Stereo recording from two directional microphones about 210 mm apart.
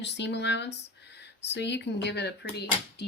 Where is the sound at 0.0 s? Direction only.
55° left (ahead or behind).